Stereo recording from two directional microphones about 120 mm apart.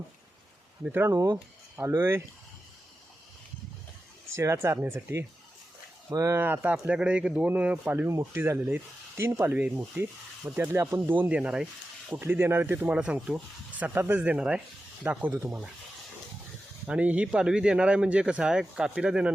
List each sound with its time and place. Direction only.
0.9 s speech: 20° right (ahead or behind)
4.4 s speech: 20° right (ahead or behind); by 11.7 s 5° right (ahead or behind)
12.2 s speech: 20° right (ahead or behind)
16.8 s speech: 10° right (ahead or behind)